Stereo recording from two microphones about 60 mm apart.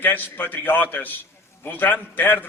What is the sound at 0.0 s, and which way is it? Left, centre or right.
A man's voice, left.